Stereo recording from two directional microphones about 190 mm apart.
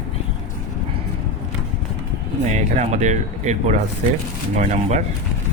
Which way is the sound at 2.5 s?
40° right (ahead or behind).